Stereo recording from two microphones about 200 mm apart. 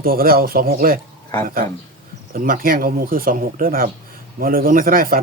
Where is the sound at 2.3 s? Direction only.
45° right (ahead or behind).